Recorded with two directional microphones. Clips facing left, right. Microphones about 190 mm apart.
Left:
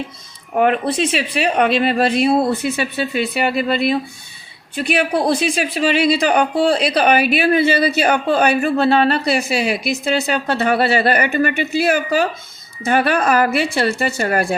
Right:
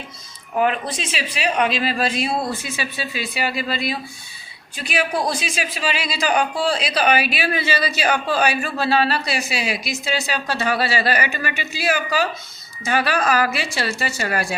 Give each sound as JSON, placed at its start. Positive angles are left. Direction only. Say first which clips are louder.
{"t": 0.5, "sound": "speech", "louder": "left 5 dB", "side_deg": 55}